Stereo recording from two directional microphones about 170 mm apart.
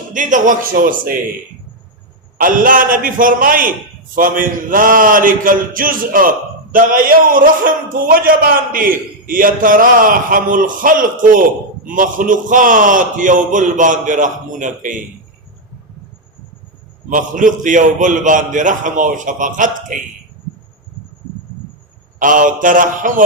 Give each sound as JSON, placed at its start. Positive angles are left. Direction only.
{"t": 0.1, "sound": "a man's voice", "side_deg": -50}
{"t": 2.4, "sound": "a man's voice", "side_deg": -55}
{"t": 17.1, "sound": "a man's voice", "side_deg": -50}
{"t": 22.2, "sound": "a man's voice", "side_deg": -50}